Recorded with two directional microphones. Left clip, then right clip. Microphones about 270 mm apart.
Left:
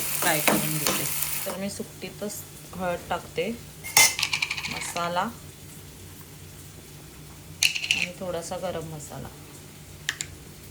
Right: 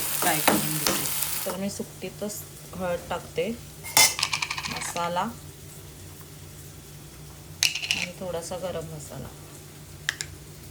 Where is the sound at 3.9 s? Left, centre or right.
Right.